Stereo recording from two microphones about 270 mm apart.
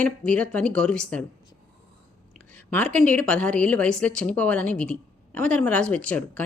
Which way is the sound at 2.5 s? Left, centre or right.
Centre.